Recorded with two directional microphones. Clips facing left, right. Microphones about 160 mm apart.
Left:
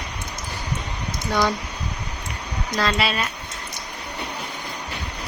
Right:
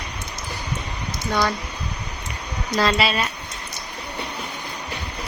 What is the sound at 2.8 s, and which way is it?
Speech, 5° right (ahead or behind).